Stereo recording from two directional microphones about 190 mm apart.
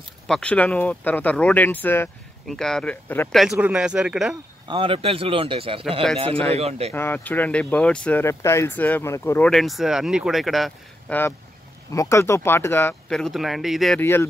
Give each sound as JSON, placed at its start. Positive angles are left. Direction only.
{"t": 0.3, "sound": "speech", "side_deg": 5}
{"t": 4.6, "sound": "speech", "side_deg": -30}
{"t": 6.9, "sound": "speech", "side_deg": 10}
{"t": 11.9, "sound": "speech", "side_deg": 15}